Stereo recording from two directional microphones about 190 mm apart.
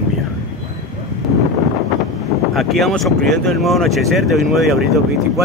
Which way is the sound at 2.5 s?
Centre (ahead or behind).